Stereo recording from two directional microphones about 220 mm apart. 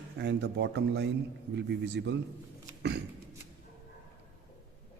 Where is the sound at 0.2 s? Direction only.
50° right (ahead or behind).